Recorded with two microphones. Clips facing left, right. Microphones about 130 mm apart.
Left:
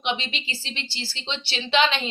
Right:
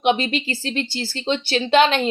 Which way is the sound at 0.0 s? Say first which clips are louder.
Right 9 dB; 50° right (ahead or behind).